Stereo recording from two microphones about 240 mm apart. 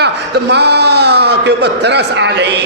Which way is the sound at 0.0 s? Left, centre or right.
Right.